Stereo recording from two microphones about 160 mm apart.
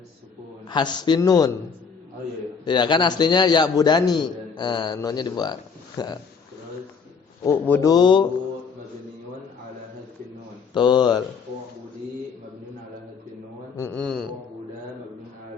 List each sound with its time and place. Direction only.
0.7 s a man's voice: 30° left (ahead or behind)
2.6 s a man's voice: 30° left (ahead or behind)
7.4 s speech: 15° left (ahead or behind)
7.9 s a man's voice: 30° left (ahead or behind)
10.8 s a man's voice: 30° left (ahead or behind)
13.7 s speech: 15° left (ahead or behind)
14.0 s a sound: centre (ahead or behind)